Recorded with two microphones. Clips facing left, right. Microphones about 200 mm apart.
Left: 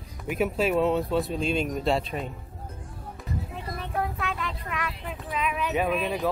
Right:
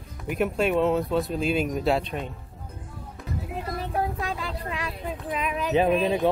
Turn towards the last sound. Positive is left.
turn(degrees=-30)  # may be behind; listen again after turning